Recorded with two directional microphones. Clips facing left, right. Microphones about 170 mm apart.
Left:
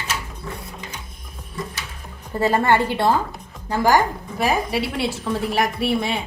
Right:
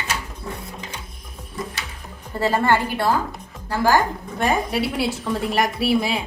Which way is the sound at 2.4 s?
20° left (ahead or behind).